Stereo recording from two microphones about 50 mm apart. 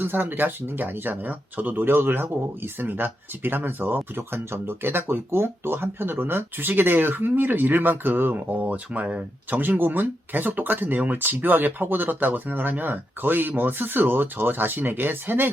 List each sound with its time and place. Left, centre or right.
0.0 s speech: right
1.7 s speech: right
9.5 s speech: right